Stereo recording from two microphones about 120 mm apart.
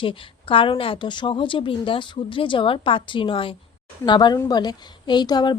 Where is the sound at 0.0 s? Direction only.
45° left (ahead or behind).